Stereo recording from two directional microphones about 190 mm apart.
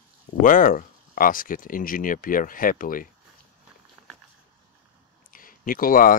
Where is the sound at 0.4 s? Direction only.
45° left (ahead or behind).